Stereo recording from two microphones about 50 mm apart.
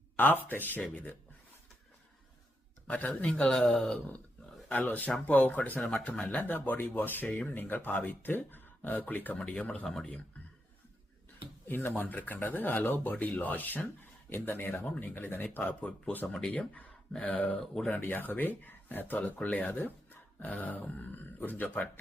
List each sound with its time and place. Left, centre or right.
0.2 s speech: left
0.8 s speech: left
2.8 s speech: left
3.2 s speech: centre
4.7 s speech: left
9.8 s speech: centre
11.9 s speech: left
14.3 s speech: left
15.5 s speech: left
17.2 s speech: left
17.6 s speech: centre
17.9 s speech: left